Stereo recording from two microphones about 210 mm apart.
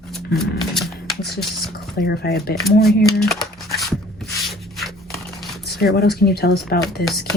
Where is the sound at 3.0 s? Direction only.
Centre (ahead or behind).